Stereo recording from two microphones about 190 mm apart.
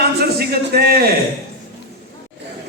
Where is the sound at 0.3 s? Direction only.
55° right (ahead or behind).